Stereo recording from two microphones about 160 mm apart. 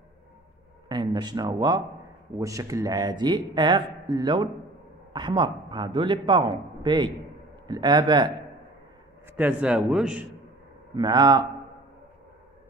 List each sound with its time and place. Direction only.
0.8 s speech: 25° right (ahead or behind)
9.4 s a man's voice: 10° right (ahead or behind)
11.0 s speech: 25° right (ahead or behind)